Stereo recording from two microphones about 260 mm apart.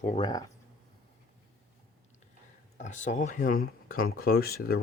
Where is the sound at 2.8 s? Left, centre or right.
Left.